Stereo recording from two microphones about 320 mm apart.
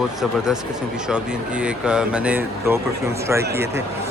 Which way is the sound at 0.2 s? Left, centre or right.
Centre.